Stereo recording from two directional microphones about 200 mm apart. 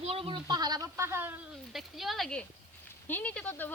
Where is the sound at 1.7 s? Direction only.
Centre (ahead or behind).